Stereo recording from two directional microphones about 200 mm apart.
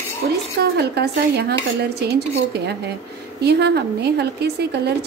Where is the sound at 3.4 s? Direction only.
55° right (ahead or behind).